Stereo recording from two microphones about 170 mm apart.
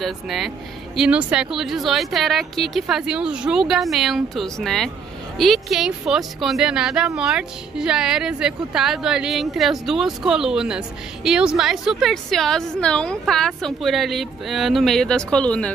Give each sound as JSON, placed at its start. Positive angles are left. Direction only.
{"t": 0.0, "sound": "a woman's voice", "side_deg": 0}